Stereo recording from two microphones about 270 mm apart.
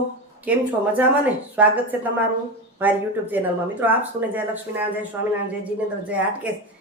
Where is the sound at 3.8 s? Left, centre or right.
Centre.